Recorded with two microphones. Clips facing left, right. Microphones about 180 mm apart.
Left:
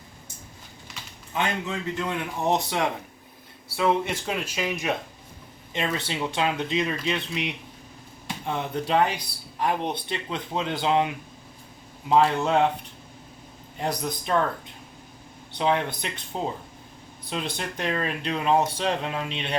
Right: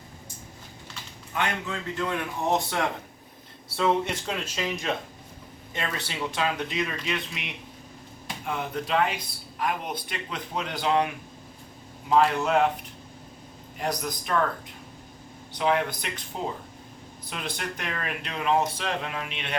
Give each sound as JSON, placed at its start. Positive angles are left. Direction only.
{"t": 1.3, "sound": "a man's voice", "side_deg": 20}
{"t": 3.8, "sound": "speech", "side_deg": 5}
{"t": 5.7, "sound": "a man's voice", "side_deg": 20}
{"t": 13.7, "sound": "a man's voice", "side_deg": 25}
{"t": 15.5, "sound": "a man's voice", "side_deg": 25}